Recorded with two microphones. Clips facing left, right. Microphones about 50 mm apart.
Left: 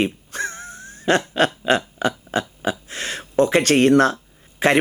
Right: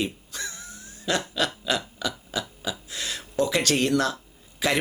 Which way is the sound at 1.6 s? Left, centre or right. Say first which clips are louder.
Left 8 dB; left.